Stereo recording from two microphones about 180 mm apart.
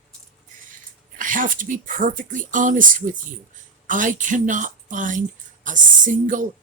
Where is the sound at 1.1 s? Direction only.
50° right (ahead or behind).